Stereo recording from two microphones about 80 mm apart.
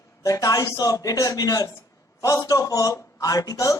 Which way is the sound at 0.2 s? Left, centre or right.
Left.